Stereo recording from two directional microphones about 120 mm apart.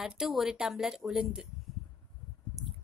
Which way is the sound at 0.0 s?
5° right (ahead or behind).